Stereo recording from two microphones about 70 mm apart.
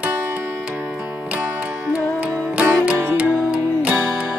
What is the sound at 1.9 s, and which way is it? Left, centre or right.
Music, right.